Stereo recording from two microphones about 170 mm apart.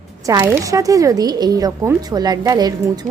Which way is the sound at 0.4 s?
15° right (ahead or behind).